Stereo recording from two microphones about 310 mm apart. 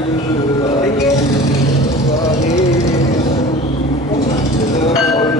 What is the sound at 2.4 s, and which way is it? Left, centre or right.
Music, left.